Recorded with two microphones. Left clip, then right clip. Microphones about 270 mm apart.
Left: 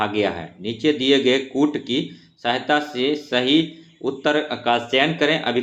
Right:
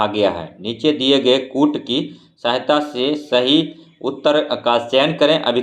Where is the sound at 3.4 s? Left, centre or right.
Centre.